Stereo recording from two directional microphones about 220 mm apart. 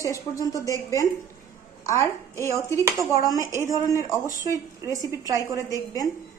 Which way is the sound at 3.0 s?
10° right (ahead or behind).